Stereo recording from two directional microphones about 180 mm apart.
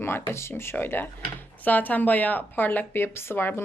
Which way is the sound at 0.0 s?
15° left (ahead or behind).